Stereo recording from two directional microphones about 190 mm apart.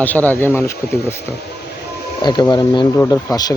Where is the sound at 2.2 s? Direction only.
25° left (ahead or behind).